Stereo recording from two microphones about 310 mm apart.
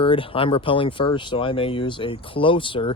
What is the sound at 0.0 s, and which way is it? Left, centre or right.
Speech, centre.